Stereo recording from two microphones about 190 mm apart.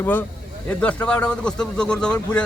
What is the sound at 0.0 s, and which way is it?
A man's voice, 10° left (ahead or behind).